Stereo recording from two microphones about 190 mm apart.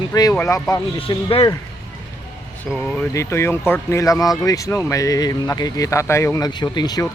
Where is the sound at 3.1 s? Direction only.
15° left (ahead or behind).